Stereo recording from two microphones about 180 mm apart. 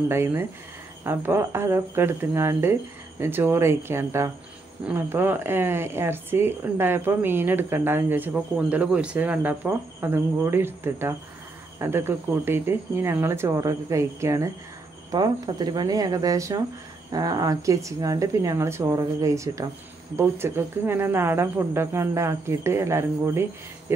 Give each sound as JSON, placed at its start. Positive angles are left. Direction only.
{"t": 0.1, "sound": "speech", "side_deg": -15}